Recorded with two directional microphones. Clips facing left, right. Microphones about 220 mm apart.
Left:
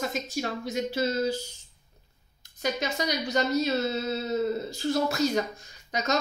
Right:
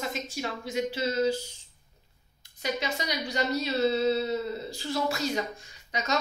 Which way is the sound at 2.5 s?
45° left (ahead or behind).